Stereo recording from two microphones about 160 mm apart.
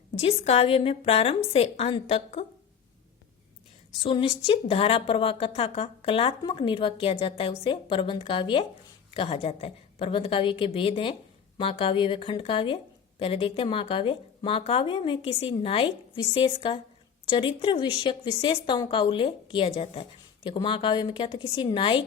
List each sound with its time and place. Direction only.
0.2 s a woman's voice: 40° left (ahead or behind)
4.0 s a woman's voice: 35° left (ahead or behind)